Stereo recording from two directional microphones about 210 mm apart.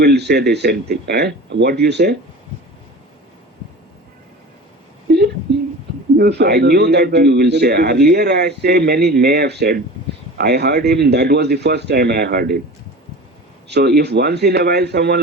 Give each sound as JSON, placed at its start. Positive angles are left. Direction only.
{"t": 0.0, "sound": "a man's voice", "side_deg": -55}
{"t": 6.1, "sound": "a man's voice", "side_deg": -50}
{"t": 13.7, "sound": "a man's voice", "side_deg": -50}